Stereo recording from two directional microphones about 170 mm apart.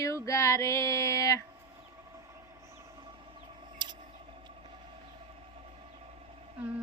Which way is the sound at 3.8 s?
25° right (ahead or behind).